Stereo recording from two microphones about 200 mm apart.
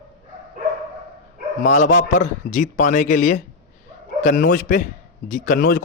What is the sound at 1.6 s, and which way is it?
A man's voice, 40° left (ahead or behind).